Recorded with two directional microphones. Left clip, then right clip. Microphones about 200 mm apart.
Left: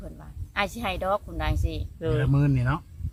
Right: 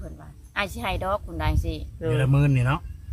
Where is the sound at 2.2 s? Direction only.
55° right (ahead or behind).